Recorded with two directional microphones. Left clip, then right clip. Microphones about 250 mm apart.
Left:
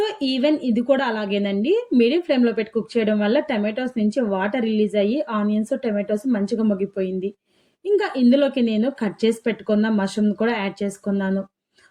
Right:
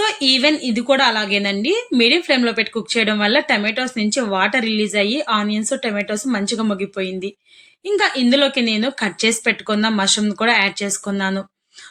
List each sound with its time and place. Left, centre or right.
0.0 s a woman's voice: centre